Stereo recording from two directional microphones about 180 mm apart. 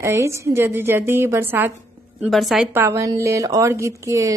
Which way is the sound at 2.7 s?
15° right (ahead or behind).